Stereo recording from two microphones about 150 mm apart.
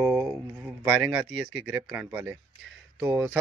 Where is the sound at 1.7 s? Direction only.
10° right (ahead or behind).